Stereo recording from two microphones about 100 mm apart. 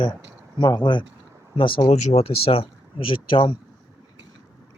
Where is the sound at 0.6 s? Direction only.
50° left (ahead or behind).